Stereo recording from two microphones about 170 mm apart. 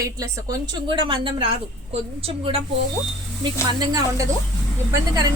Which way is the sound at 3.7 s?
20° right (ahead or behind).